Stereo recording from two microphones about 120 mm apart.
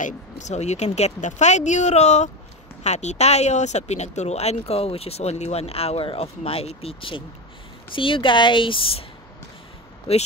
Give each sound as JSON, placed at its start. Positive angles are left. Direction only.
{"t": 0.0, "sound": "speech", "side_deg": 80}
{"t": 10.1, "sound": "speech", "side_deg": 55}